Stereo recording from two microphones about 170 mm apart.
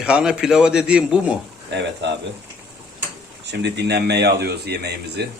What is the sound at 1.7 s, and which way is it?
Speech, 90° right.